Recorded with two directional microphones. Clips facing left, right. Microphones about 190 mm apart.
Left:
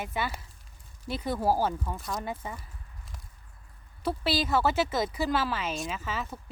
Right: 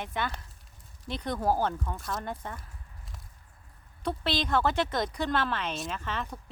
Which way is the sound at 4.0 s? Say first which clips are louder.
Left 2 dB; 5° left (ahead or behind).